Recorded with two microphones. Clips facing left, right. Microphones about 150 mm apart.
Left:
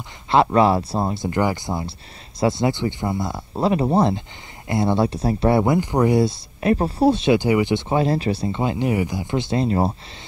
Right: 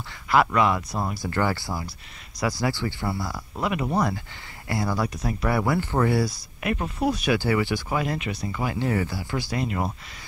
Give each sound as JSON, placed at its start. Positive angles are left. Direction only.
{"t": 0.3, "sound": "speech", "side_deg": 30}
{"t": 6.6, "sound": "speech", "side_deg": 30}